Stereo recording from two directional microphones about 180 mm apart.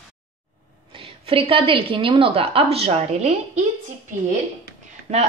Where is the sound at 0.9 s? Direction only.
30° right (ahead or behind).